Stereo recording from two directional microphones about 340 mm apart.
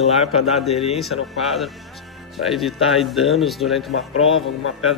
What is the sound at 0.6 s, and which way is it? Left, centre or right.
Speech, centre.